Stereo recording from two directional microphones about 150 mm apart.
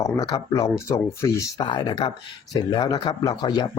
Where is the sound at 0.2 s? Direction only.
25° left (ahead or behind).